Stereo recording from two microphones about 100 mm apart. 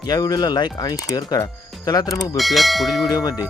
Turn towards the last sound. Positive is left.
turn(degrees=40)  # may be behind; listen again after turning